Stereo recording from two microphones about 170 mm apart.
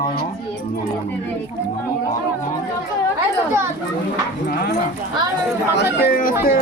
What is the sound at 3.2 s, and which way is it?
Speech, 15° right (ahead or behind).